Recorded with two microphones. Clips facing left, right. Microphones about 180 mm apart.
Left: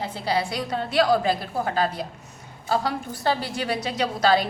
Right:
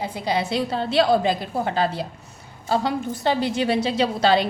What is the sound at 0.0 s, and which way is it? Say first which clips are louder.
A woman's voice: right 1 dB; 15° right (ahead or behind).